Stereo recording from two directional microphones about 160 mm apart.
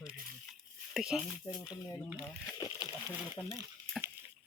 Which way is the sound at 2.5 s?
25° left (ahead or behind).